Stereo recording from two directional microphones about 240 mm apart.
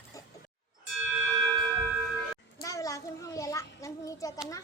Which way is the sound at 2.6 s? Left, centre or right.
Centre.